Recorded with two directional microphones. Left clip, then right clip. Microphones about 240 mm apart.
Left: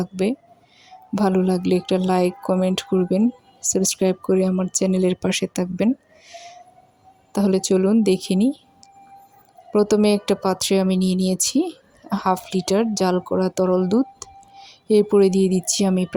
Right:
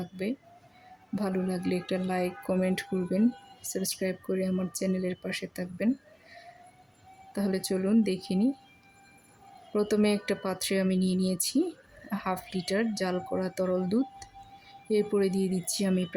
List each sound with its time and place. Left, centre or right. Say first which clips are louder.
0.0 s a woman's voice: left 12 dB; left
7.3 s a woman's voice: left 12 dB; left
9.7 s a woman's voice: left 10 dB; left